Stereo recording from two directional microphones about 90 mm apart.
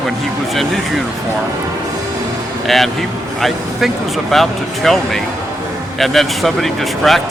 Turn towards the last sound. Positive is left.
turn(degrees=0)  # may be behind; listen again after turning